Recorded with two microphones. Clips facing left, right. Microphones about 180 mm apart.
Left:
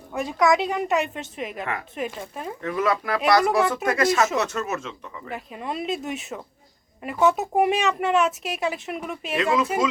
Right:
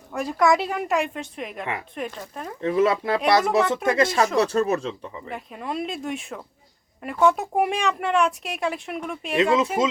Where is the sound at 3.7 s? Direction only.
25° right (ahead or behind).